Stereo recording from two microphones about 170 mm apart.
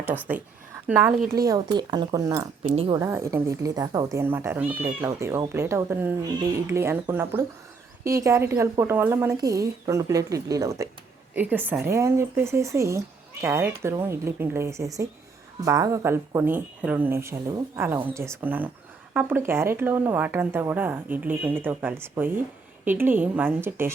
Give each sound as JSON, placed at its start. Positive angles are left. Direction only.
{"t": 0.1, "sound": "a woman's voice", "side_deg": -10}
{"t": 1.2, "sound": "speech", "side_deg": -60}
{"t": 1.5, "sound": "a woman's voice", "side_deg": -25}
{"t": 2.7, "sound": "a woman's voice", "side_deg": -30}
{"t": 3.0, "sound": "a woman's voice", "side_deg": -15}